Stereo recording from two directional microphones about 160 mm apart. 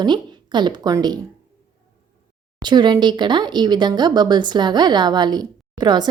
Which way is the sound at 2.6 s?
30° right (ahead or behind).